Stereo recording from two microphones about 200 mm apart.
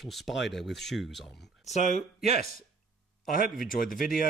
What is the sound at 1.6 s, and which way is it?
Speech, 35° left (ahead or behind).